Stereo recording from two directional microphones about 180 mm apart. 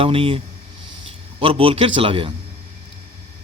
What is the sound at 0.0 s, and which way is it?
Speech, 30° right (ahead or behind).